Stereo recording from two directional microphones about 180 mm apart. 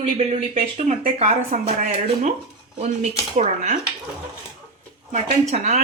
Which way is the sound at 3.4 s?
40° right (ahead or behind).